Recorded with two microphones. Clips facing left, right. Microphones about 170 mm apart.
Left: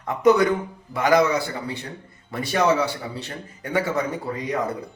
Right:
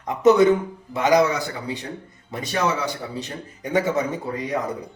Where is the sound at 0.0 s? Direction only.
20° right (ahead or behind).